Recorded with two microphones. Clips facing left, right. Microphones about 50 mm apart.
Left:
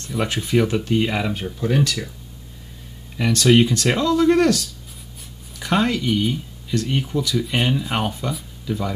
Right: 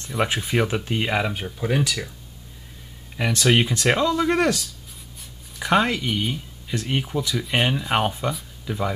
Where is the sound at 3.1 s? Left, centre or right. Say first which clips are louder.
Left 4 dB; centre.